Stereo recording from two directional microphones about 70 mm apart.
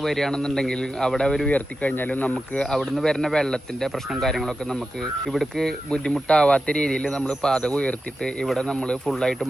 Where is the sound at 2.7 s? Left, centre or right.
Centre.